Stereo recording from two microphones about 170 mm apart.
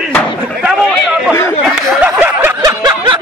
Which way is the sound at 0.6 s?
5° right (ahead or behind).